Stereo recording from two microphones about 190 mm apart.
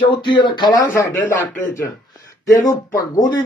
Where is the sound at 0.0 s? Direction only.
25° left (ahead or behind).